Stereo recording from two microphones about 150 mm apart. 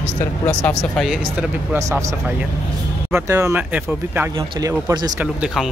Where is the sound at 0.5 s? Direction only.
10° left (ahead or behind).